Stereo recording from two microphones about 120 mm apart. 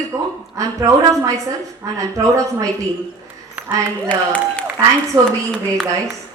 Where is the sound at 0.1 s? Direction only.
25° right (ahead or behind).